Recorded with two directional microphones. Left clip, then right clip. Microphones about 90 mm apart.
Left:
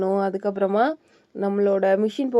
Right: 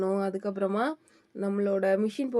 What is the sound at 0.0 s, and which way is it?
Speech, 40° left (ahead or behind).